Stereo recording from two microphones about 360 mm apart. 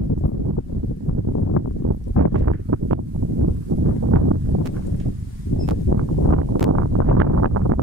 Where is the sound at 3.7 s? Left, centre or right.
Right.